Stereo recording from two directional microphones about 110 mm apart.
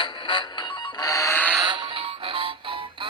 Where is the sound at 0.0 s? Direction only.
45° left (ahead or behind).